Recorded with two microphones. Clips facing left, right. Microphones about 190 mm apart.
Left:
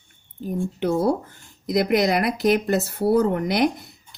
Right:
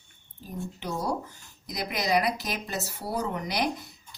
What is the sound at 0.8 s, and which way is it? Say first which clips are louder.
Speech: left 10 dB; 55° left (ahead or behind).